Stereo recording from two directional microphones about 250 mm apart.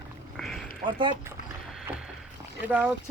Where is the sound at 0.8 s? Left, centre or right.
Centre.